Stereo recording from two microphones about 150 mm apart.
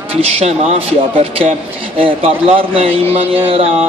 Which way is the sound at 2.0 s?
40° right (ahead or behind).